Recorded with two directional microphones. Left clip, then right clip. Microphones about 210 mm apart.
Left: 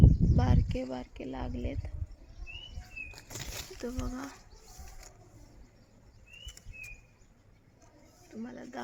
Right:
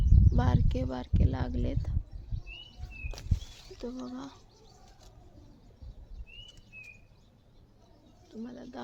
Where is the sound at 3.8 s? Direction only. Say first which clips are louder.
Right 1 dB; 5° left (ahead or behind).